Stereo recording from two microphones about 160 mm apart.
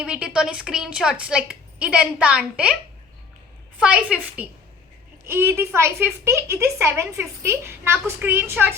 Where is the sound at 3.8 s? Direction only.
5° right (ahead or behind).